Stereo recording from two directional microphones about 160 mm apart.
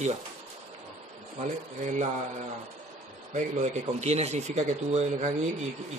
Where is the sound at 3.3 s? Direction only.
45° right (ahead or behind).